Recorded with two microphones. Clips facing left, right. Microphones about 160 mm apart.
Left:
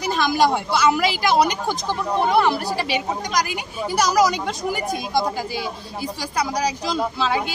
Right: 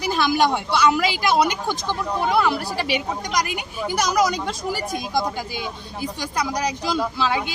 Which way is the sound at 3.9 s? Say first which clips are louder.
Left 2 dB; 5° left (ahead or behind).